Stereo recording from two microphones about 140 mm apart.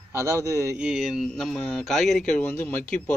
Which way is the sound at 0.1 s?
20° right (ahead or behind).